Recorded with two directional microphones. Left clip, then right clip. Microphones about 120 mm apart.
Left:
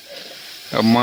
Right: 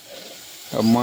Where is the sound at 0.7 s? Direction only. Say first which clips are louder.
Left 3 dB; 10° left (ahead or behind).